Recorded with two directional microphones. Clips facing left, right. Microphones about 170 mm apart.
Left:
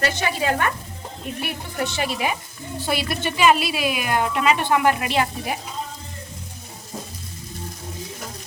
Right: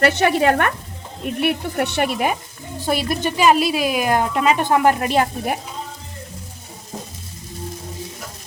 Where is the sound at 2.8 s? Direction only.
45° right (ahead or behind).